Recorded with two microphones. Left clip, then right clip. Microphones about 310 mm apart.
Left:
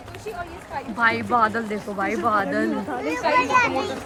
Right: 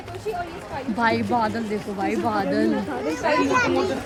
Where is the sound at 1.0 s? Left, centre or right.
Centre.